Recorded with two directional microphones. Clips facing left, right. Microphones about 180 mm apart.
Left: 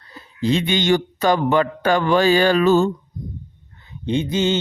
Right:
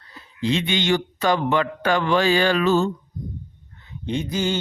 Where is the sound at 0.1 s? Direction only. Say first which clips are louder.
Left 3 dB; 40° left (ahead or behind).